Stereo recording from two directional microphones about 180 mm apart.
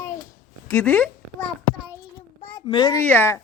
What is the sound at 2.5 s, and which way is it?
Speech, 25° left (ahead or behind).